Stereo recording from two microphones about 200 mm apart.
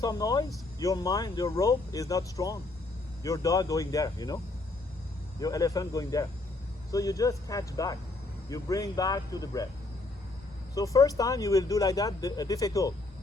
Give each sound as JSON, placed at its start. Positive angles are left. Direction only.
{"t": 0.0, "sound": "speech", "side_deg": 15}
{"t": 5.4, "sound": "speech", "side_deg": 15}
{"t": 10.8, "sound": "speech", "side_deg": 15}